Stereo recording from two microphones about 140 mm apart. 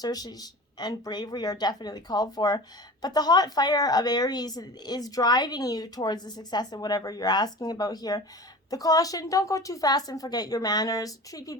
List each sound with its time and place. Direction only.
0.0 s a woman's voice: 30° left (ahead or behind)